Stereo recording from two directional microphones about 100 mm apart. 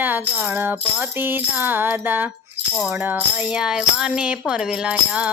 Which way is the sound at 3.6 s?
5° right (ahead or behind).